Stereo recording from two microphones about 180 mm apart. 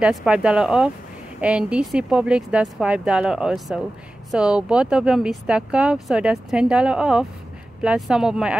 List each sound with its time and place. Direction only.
0.0 s speech: 5° right (ahead or behind)